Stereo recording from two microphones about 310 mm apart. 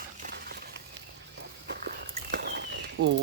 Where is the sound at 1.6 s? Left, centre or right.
Right.